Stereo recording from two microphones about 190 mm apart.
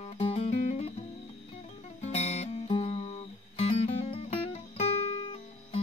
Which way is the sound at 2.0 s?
35° left (ahead or behind).